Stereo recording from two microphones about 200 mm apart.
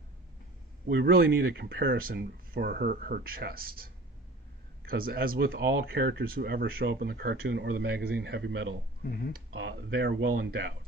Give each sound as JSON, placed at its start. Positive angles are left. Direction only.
{"t": 0.9, "sound": "speech", "side_deg": -55}